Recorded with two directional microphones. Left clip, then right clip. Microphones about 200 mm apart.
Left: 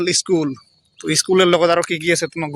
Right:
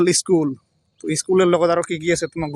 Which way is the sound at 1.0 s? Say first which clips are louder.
Left 2 dB; centre (ahead or behind).